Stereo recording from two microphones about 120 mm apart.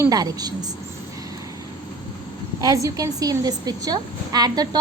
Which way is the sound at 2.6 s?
30° right (ahead or behind).